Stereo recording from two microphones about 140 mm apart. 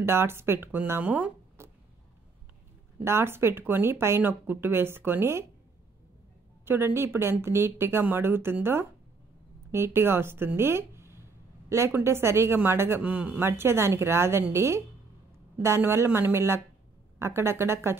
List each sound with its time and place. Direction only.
0.0 s speech: 20° right (ahead or behind)
3.0 s speech: 20° right (ahead or behind)
6.6 s speech: 15° right (ahead or behind)